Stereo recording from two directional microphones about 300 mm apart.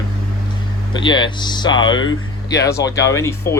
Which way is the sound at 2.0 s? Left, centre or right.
Left.